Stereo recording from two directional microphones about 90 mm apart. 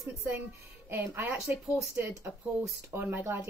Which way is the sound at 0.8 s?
25° right (ahead or behind).